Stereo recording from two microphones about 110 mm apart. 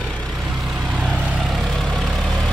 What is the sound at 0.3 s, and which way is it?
Vehicle, 5° right (ahead or behind).